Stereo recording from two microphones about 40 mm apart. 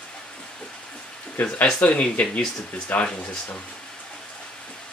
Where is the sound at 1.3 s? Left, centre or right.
Left.